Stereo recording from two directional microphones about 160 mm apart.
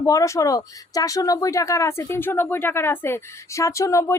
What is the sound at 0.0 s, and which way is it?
A woman's voice, 20° left (ahead or behind).